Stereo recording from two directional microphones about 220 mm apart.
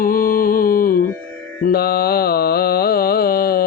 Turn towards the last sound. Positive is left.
turn(degrees=45)  # may be behind; listen again after turning